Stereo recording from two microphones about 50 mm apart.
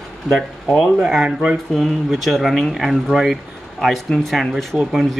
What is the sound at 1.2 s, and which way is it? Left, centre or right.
Speech, centre.